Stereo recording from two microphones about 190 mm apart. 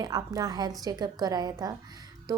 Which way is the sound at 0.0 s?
20° right (ahead or behind).